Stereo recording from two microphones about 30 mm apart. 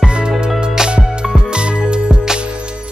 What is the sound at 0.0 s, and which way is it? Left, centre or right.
Music, right.